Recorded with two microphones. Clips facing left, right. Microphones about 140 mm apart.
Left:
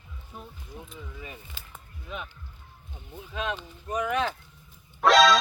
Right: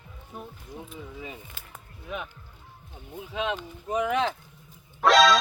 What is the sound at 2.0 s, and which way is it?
Speech, 5° right (ahead or behind).